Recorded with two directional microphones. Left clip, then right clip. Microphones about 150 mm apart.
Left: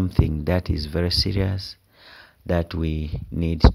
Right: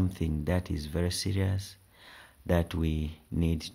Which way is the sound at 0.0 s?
35° left (ahead or behind).